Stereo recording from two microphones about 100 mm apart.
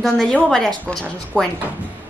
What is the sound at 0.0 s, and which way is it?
A woman's voice, 5° left (ahead or behind).